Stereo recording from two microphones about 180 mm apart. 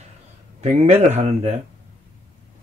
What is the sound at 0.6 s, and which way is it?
Speech, 35° right (ahead or behind).